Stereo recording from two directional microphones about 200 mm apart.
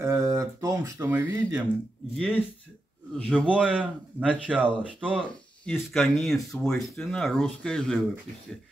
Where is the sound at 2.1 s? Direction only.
5° left (ahead or behind).